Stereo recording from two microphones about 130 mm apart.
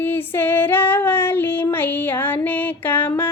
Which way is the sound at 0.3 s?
15° left (ahead or behind).